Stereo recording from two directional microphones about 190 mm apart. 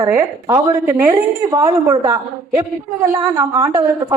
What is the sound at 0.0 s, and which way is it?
A woman's voice, 15° right (ahead or behind).